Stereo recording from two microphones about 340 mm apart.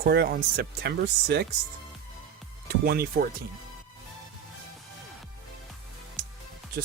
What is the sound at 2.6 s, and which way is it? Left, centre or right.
Speech, right.